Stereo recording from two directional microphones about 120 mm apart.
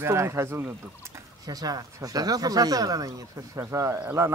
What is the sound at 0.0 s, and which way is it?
A man's voice, 20° right (ahead or behind).